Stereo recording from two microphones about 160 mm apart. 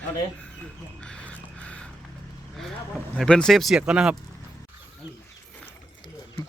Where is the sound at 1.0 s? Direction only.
5° left (ahead or behind).